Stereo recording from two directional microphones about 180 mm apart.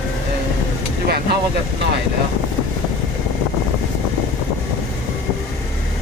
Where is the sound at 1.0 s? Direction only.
60° right (ahead or behind).